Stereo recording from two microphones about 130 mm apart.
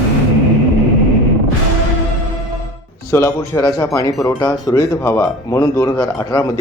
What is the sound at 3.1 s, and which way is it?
Speech, 20° left (ahead or behind).